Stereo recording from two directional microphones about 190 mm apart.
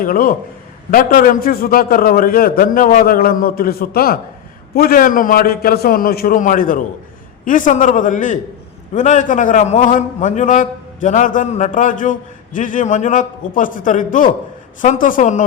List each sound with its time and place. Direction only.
0.0 s a man's voice: 50° left (ahead or behind)